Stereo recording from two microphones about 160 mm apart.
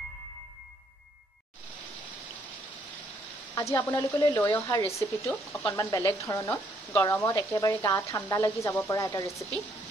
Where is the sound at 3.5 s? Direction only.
20° left (ahead or behind).